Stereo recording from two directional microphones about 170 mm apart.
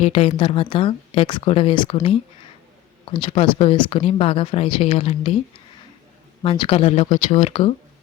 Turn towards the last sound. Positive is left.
turn(degrees=35)  # may be behind; listen again after turning